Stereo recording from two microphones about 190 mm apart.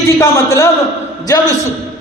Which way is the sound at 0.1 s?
15° left (ahead or behind).